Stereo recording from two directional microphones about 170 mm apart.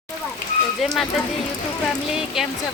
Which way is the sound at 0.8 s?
Centre (ahead or behind).